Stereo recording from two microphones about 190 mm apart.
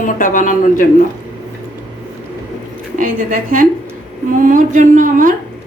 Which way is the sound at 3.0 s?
45° right (ahead or behind).